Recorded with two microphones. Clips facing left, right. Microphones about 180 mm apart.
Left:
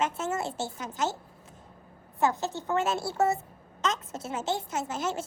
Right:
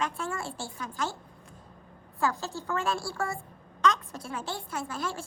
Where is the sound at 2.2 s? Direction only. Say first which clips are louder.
Left 3 dB; 20° left (ahead or behind).